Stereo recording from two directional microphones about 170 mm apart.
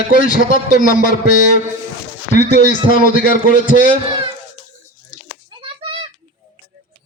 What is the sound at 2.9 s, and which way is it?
Speech, 55° left (ahead or behind).